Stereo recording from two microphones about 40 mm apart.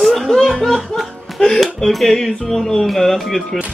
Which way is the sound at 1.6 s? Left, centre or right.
Centre.